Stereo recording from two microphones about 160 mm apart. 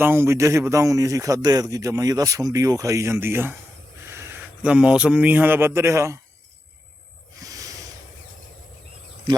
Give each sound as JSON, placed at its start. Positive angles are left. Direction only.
{"t": 0.0, "sound": "a man's voice", "side_deg": -15}
{"t": 7.3, "sound": "snake", "side_deg": -20}